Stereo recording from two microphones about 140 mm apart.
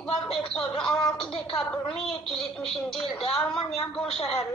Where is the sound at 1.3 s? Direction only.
35° left (ahead or behind).